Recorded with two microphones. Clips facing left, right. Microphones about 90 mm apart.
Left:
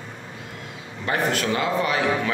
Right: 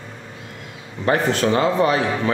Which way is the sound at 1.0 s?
35° right (ahead or behind).